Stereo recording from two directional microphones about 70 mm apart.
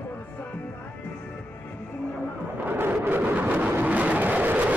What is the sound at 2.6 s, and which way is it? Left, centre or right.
Vehicle, right.